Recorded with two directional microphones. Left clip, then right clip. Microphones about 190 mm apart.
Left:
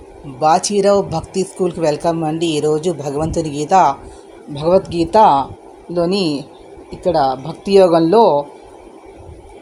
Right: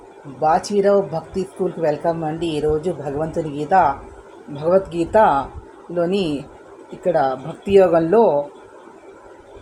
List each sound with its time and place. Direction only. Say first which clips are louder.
0.3 s speech: left 4 dB; 35° left (ahead or behind)